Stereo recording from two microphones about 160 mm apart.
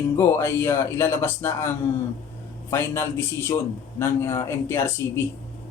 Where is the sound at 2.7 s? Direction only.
15° left (ahead or behind).